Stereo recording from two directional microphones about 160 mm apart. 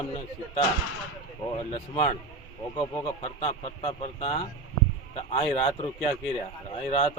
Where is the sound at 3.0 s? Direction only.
40° left (ahead or behind).